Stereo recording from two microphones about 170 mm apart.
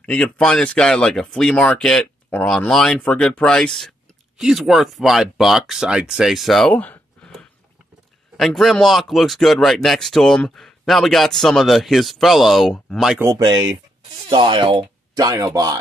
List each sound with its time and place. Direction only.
0.0 s speech: 5° left (ahead or behind)
13.4 s speech: 25° right (ahead or behind)